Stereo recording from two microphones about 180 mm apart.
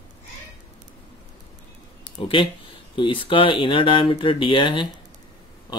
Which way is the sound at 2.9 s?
30° left (ahead or behind).